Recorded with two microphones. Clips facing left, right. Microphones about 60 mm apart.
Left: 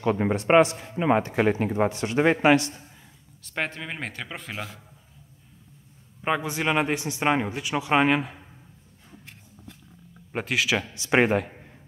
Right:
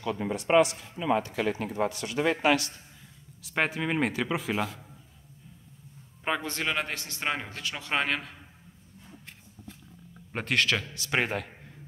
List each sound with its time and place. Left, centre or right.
0.0 s a man's voice: left
3.4 s speech: centre
6.2 s speech: centre
10.1 s speech: centre
11.0 s a man's voice: left